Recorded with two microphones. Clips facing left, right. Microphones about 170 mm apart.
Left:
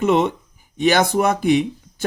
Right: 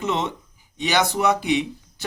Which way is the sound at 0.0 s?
55° left (ahead or behind).